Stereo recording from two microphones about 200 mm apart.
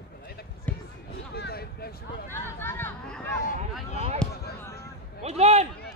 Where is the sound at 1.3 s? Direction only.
55° left (ahead or behind).